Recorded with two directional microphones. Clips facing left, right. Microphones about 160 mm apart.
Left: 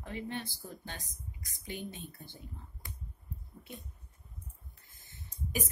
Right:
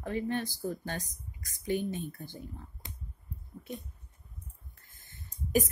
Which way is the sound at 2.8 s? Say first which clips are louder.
Right 1 dB; 20° right (ahead or behind).